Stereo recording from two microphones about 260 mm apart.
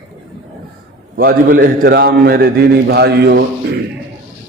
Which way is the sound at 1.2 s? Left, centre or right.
Right.